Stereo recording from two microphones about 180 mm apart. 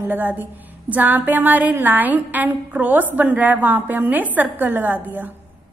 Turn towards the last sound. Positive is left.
turn(degrees=-10)  # may be behind; listen again after turning